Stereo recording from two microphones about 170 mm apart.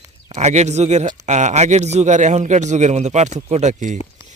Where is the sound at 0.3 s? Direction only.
40° right (ahead or behind).